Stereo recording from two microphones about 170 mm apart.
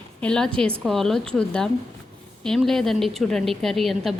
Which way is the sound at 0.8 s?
Centre (ahead or behind).